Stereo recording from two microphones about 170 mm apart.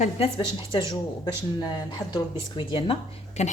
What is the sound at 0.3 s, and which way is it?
Speech, 30° left (ahead or behind).